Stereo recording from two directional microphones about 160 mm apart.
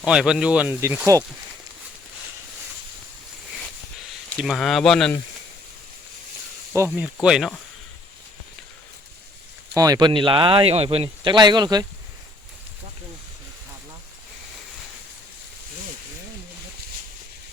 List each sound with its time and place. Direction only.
0.0 s speech: 5° right (ahead or behind)
4.3 s speech: 5° left (ahead or behind)
6.7 s speech: 15° right (ahead or behind)
9.7 s speech: 25° right (ahead or behind)